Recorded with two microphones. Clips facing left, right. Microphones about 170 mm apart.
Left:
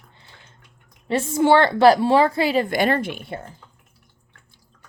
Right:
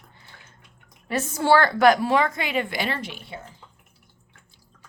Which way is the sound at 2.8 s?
50° left (ahead or behind).